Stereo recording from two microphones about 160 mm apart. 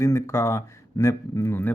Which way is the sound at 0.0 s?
20° left (ahead or behind).